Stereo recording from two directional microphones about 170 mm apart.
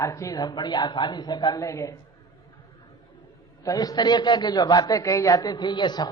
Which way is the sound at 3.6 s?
20° left (ahead or behind).